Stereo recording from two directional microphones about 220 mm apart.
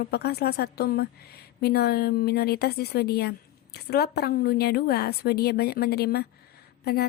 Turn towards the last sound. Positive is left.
turn(degrees=45)  # may be behind; listen again after turning